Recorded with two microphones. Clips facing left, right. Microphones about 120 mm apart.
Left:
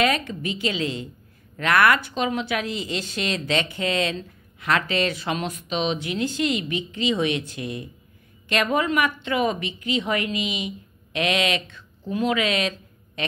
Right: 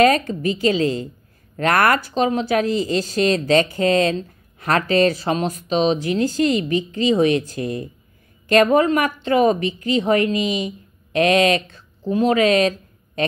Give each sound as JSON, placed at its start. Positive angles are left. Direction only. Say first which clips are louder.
{"t": 0.0, "sound": "speech", "louder": "right 7 dB", "side_deg": -40}